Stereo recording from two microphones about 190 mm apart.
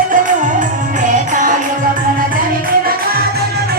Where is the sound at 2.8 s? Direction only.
50° right (ahead or behind).